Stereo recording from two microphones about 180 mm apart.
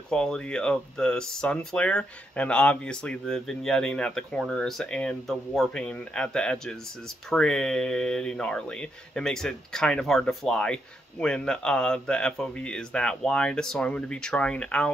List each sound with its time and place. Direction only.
0.1 s speech: 5° left (ahead or behind)